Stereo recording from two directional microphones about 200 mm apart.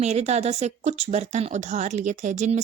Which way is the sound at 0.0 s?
35° right (ahead or behind).